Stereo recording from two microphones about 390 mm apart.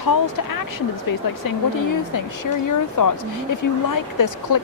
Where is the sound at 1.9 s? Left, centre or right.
Left.